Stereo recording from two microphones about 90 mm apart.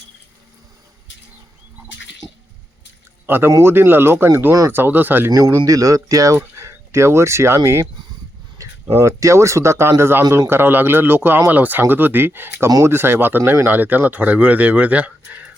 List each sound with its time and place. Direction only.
3.2 s speech: 25° right (ahead or behind)
5.3 s speech: 35° right (ahead or behind); by 15.4 s 20° right (ahead or behind)